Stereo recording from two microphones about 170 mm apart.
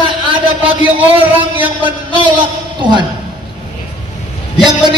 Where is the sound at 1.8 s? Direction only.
30° right (ahead or behind).